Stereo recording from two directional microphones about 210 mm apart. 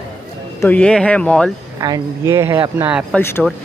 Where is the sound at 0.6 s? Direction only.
5° left (ahead or behind).